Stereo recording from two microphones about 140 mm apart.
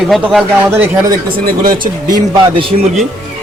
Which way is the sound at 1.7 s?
35° right (ahead or behind).